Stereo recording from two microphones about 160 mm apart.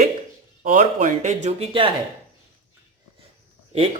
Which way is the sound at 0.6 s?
50° right (ahead or behind).